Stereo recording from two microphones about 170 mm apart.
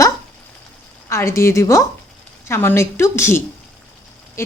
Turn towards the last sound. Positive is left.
turn(degrees=15)  # may be behind; listen again after turning